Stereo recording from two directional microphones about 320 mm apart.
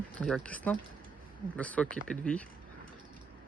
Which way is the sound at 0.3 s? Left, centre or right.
Centre.